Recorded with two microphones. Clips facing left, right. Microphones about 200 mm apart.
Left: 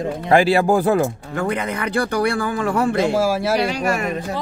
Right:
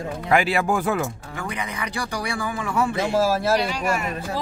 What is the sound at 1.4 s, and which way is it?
Speech, 55° left (ahead or behind).